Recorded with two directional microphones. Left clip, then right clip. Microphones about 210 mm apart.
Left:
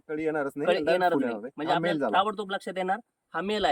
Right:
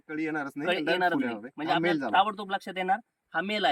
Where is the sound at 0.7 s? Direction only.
10° left (ahead or behind).